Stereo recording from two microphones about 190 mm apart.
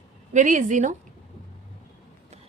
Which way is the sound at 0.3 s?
40° right (ahead or behind).